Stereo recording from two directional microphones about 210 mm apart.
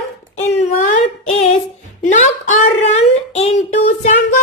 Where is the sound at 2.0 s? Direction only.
35° left (ahead or behind).